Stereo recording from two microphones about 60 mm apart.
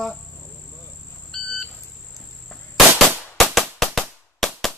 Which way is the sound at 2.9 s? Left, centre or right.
Right.